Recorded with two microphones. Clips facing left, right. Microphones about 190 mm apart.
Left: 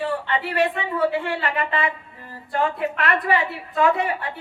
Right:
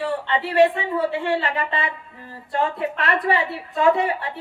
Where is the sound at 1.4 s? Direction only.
30° right (ahead or behind).